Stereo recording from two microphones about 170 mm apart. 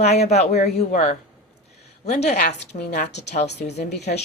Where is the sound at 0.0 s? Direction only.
40° left (ahead or behind).